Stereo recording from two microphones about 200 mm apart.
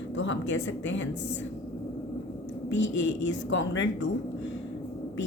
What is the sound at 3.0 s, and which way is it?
A woman's voice, 65° left (ahead or behind).